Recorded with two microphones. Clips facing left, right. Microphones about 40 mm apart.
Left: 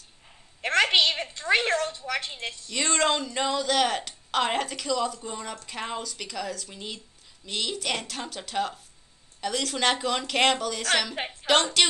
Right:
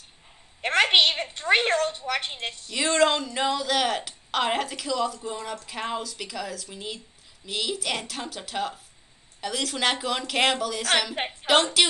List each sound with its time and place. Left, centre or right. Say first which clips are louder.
0.6 s a sound: right 1 dB; right
1.5 s a woman's voice: right 2 dB; right
2.7 s a woman's voice: right 3 dB; centre